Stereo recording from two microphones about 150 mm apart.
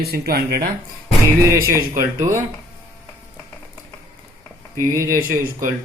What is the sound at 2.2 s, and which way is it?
Speech, 20° right (ahead or behind).